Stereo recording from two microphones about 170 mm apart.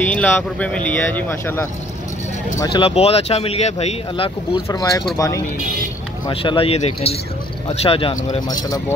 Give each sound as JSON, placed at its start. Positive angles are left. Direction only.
{"t": 0.0, "sound": "speech", "side_deg": 10}
{"t": 2.6, "sound": "speech", "side_deg": 30}
{"t": 4.6, "sound": "speech", "side_deg": 20}
{"t": 6.2, "sound": "speech", "side_deg": 30}